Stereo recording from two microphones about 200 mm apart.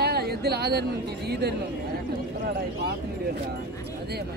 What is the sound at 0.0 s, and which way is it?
Speech, 55° right (ahead or behind).